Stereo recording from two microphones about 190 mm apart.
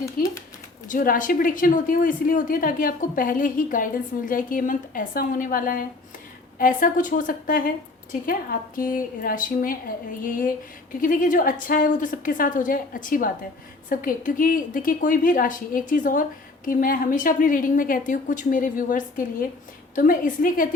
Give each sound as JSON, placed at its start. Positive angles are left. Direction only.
{"t": 0.0, "sound": "speech", "side_deg": 15}
{"t": 0.9, "sound": "speech", "side_deg": 45}